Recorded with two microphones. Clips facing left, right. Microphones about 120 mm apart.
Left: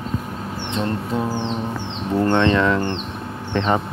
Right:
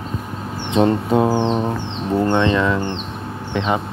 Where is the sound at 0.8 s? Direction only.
65° right (ahead or behind).